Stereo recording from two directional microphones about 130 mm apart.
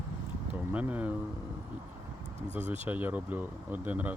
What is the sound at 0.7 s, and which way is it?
Speech, 10° right (ahead or behind).